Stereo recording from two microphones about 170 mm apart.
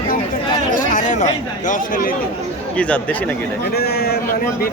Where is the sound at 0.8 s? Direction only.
50° left (ahead or behind).